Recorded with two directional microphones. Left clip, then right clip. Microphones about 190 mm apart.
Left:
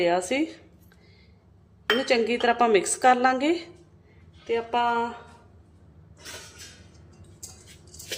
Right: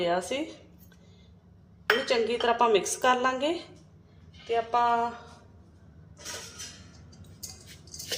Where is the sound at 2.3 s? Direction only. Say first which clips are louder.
Left 1 dB; 35° left (ahead or behind).